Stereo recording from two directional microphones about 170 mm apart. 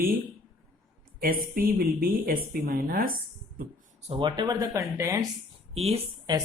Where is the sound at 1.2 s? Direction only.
60° right (ahead or behind).